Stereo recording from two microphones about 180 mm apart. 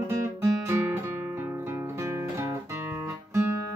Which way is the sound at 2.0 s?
15° right (ahead or behind).